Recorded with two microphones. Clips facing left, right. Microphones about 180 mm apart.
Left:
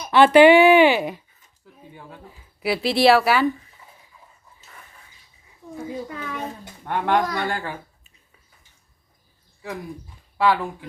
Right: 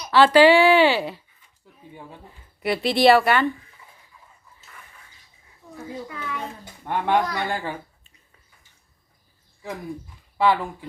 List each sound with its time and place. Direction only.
0.1 s speech: 20° left (ahead or behind)
2.6 s speech: centre (ahead or behind)
6.8 s speech: 5° right (ahead or behind)
10.3 s speech: 10° right (ahead or behind)